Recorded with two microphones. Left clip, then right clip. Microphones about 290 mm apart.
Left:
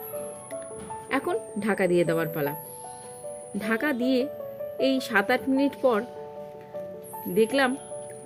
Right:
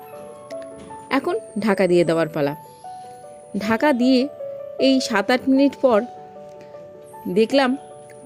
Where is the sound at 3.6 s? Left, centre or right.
Right.